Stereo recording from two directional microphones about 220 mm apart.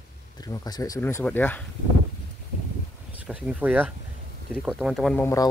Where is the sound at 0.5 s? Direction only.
15° left (ahead or behind).